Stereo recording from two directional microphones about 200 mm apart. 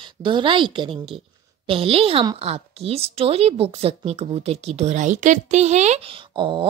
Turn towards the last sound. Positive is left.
turn(degrees=-25)  # may be behind; listen again after turning